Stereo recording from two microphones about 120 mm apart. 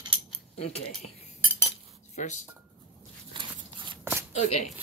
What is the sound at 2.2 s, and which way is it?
Speech, 80° left.